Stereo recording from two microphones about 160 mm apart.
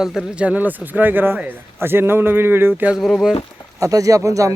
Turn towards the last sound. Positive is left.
turn(degrees=-20)  # may be behind; listen again after turning